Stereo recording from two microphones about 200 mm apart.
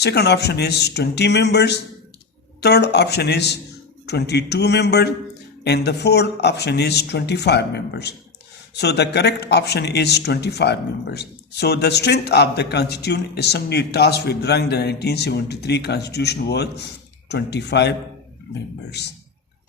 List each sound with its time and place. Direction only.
0.0 s speech: 55° left (ahead or behind)